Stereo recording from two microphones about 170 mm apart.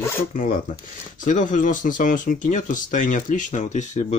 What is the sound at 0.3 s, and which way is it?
Speech, 50° left (ahead or behind).